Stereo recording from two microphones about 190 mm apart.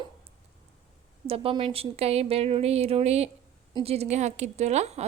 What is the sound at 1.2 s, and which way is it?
Speech, 30° right (ahead or behind).